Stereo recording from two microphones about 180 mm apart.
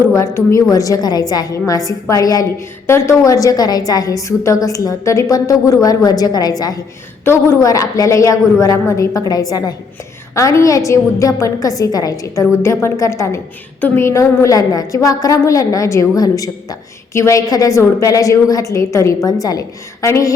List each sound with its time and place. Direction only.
0.1 s a woman's voice: 15° left (ahead or behind)